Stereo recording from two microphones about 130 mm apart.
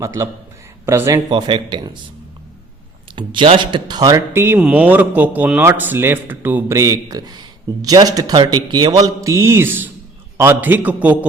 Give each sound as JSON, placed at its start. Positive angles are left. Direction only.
{"t": 0.9, "sound": "a man's voice", "side_deg": -20}
{"t": 1.1, "sound": "speech", "side_deg": -35}
{"t": 3.2, "sound": "speech", "side_deg": -40}
{"t": 4.3, "sound": "a man's voice", "side_deg": -20}